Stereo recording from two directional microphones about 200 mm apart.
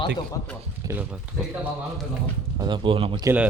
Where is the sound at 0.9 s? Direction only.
5° right (ahead or behind).